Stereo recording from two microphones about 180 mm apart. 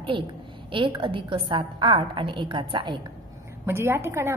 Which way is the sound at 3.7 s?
15° right (ahead or behind).